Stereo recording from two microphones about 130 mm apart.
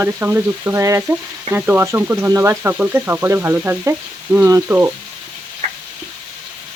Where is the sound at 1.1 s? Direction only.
15° right (ahead or behind).